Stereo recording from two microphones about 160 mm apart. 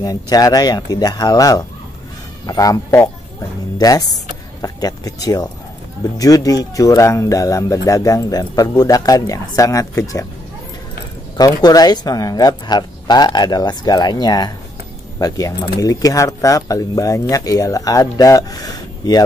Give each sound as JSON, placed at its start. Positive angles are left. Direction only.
{"t": 0.0, "sound": "speech", "side_deg": 25}
{"t": 11.3, "sound": "speech", "side_deg": 25}